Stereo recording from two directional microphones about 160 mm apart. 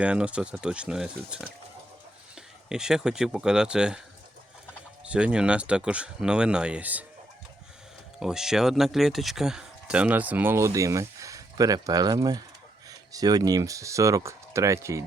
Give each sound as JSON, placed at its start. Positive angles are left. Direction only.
{"t": 0.0, "sound": "speech", "side_deg": -5}
{"t": 5.0, "sound": "speech", "side_deg": -5}
{"t": 8.2, "sound": "speech", "side_deg": -5}